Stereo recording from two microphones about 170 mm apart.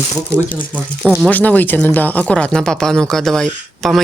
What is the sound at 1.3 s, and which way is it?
Speech, 10° left (ahead or behind).